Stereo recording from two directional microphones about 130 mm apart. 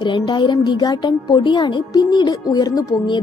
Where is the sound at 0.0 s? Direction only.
35° left (ahead or behind).